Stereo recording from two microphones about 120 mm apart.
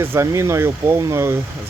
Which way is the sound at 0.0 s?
20° right (ahead or behind).